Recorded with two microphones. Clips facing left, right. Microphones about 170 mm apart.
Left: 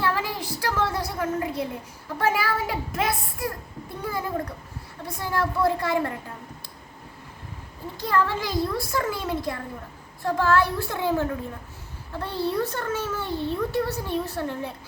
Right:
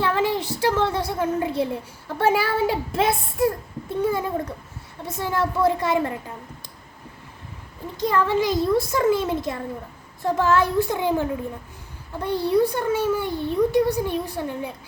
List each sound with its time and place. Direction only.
0.0 s a sound: 25° right (ahead or behind)
2.1 s a child's voice: 30° right (ahead or behind)
7.9 s a child's voice: 20° right (ahead or behind)